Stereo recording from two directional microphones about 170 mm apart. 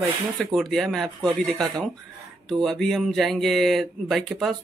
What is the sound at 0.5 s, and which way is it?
Speech, centre (ahead or behind).